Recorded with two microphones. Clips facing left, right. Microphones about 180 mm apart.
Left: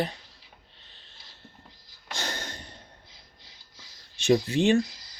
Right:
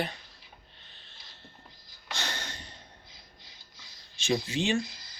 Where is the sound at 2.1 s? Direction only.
45° left (ahead or behind).